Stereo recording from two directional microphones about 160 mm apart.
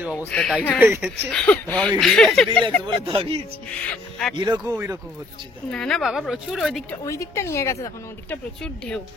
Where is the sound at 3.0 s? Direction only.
35° right (ahead or behind).